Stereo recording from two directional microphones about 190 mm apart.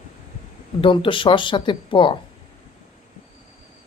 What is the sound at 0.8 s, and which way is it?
Speech, 25° left (ahead or behind).